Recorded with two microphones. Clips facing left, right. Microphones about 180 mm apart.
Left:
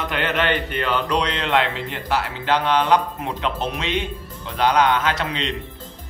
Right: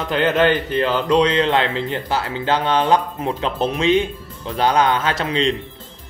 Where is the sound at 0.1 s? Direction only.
30° right (ahead or behind).